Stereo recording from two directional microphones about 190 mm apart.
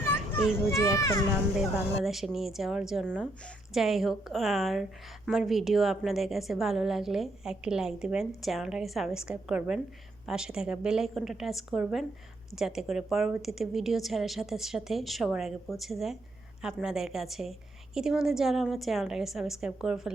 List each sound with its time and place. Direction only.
0.0 s children playing: 10° left (ahead or behind)
0.7 s a child's voice: 15° left (ahead or behind)
2.0 s a woman's voice: centre (ahead or behind)